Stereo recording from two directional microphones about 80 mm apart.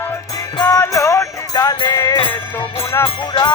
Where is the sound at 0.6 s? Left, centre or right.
Left.